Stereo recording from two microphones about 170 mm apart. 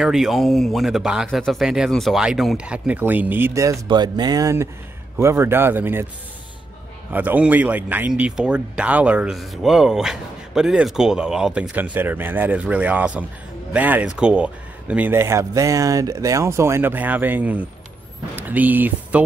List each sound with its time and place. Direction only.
0.0 s speech: centre (ahead or behind)
3.8 s speech: 25° right (ahead or behind)
7.1 s speech: 10° right (ahead or behind)